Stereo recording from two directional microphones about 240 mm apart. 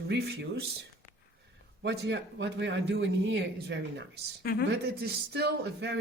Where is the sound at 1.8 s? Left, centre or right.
Right.